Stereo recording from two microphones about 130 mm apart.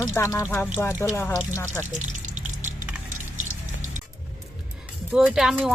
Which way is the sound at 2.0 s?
70° right (ahead or behind).